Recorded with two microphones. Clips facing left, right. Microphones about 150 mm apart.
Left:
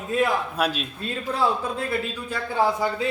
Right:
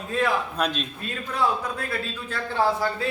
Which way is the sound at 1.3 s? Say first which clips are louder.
Left 1 dB; 25° left (ahead or behind).